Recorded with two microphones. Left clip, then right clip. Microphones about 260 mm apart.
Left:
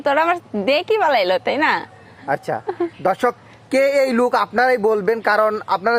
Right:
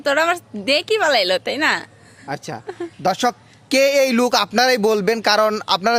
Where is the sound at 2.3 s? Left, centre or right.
Right.